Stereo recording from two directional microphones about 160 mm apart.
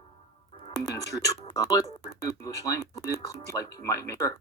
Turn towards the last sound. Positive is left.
turn(degrees=20)  # may be behind; listen again after turning